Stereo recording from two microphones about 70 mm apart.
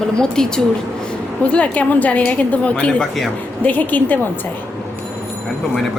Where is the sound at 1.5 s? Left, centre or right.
Left.